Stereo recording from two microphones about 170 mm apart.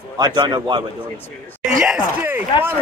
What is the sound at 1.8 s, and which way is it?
Speech, 10° right (ahead or behind).